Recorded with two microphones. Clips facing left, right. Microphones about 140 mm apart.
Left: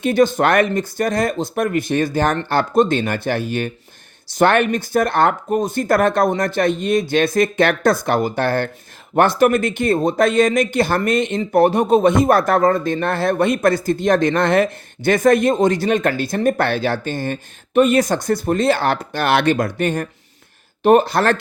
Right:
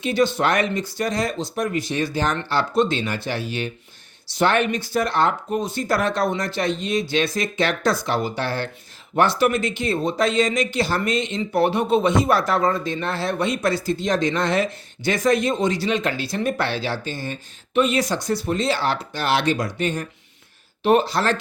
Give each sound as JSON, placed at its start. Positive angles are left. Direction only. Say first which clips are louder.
{"t": 0.0, "sound": "speech", "louder": "left 5 dB", "side_deg": 50}